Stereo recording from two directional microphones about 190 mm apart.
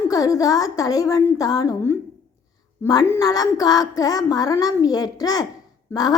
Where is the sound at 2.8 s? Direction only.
15° left (ahead or behind).